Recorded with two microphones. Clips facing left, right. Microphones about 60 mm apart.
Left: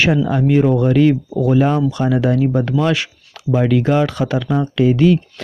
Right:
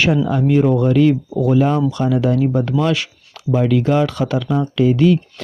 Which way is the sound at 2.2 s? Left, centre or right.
Left.